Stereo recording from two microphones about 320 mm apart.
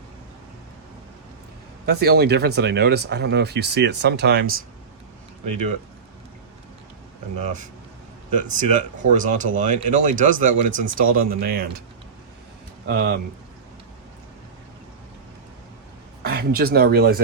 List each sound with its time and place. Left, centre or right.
1.9 s speech: right
8.4 s speech: right
12.8 s speech: right
16.2 s speech: right